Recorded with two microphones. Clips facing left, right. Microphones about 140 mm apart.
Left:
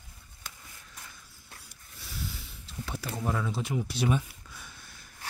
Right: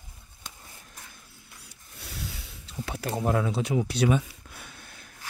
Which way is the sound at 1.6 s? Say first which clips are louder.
Right 4 dB; 70° right (ahead or behind).